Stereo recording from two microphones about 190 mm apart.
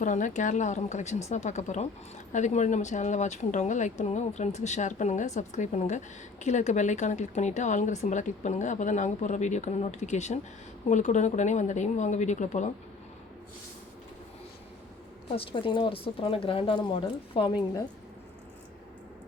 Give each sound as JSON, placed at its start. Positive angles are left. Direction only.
{"t": 0.0, "sound": "speech", "side_deg": 40}
{"t": 15.4, "sound": "speech", "side_deg": 25}